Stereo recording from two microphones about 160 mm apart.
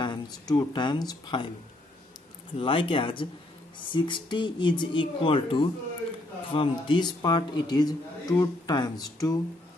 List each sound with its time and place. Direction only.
0.0 s a man's voice: 25° left (ahead or behind)
2.6 s a man's voice: 35° left (ahead or behind)